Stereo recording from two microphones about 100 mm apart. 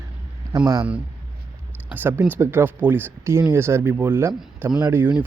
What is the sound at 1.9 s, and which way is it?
Speech, 20° right (ahead or behind).